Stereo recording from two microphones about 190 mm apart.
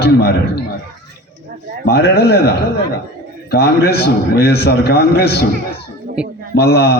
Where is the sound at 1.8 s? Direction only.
55° left (ahead or behind).